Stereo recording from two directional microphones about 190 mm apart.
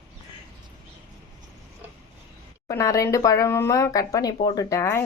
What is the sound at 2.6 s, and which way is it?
Speech, 15° left (ahead or behind).